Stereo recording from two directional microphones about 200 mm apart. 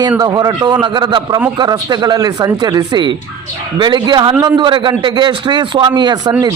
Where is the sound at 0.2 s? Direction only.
20° right (ahead or behind).